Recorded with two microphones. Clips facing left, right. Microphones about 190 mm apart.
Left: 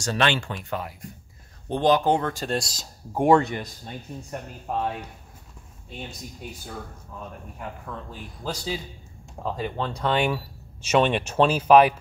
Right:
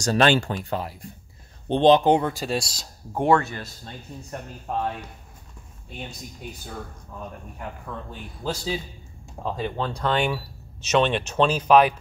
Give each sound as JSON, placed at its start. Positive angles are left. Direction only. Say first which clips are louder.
{"t": 0.0, "sound": "speech", "louder": "right 5 dB", "side_deg": -40}
{"t": 3.3, "sound": "speech", "louder": "left 2 dB", "side_deg": 15}
{"t": 7.5, "sound": "a man's voice", "louder": "even", "side_deg": 0}